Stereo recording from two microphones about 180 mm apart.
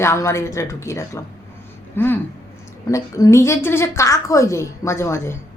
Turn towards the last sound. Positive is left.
turn(degrees=15)  # may be behind; listen again after turning